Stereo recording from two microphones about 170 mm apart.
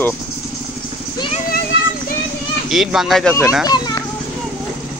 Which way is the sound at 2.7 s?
5° right (ahead or behind).